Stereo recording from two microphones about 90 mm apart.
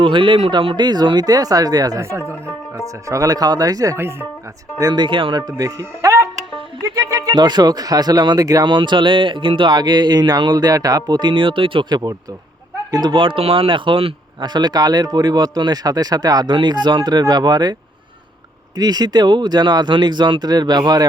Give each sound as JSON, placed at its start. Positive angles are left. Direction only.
{"t": 0.0, "sound": "a man's voice", "side_deg": -65}
{"t": 0.9, "sound": "speech", "side_deg": -50}
{"t": 2.0, "sound": "speech", "side_deg": -30}
{"t": 3.9, "sound": "speech", "side_deg": -25}
{"t": 4.9, "sound": "speech", "side_deg": -65}
{"t": 5.4, "sound": "speech", "side_deg": -40}
{"t": 7.3, "sound": "speech", "side_deg": -50}
{"t": 8.6, "sound": "speech", "side_deg": -60}
{"t": 13.2, "sound": "speech", "side_deg": -90}
{"t": 14.4, "sound": "speech", "side_deg": -50}
{"t": 18.8, "sound": "speech", "side_deg": -50}